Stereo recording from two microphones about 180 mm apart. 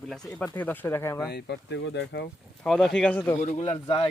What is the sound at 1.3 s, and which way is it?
Speech, 70° left (ahead or behind).